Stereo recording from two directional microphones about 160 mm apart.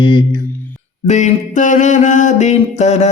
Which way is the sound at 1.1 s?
50° left (ahead or behind).